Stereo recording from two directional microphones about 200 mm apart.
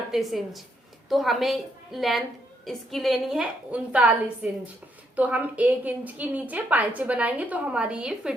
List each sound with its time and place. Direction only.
0.1 s a woman's voice: centre (ahead or behind)